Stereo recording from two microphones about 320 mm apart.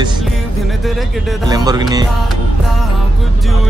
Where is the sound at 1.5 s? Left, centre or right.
Centre.